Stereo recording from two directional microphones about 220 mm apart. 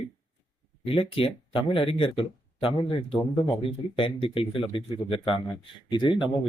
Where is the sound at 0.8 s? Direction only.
25° left (ahead or behind).